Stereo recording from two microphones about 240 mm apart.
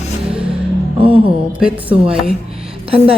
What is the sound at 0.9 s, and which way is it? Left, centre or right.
Music, right.